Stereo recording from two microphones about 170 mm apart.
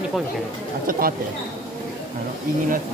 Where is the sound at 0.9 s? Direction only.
55° right (ahead or behind).